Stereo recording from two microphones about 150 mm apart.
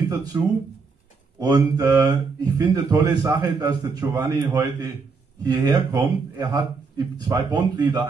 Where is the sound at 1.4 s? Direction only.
25° right (ahead or behind).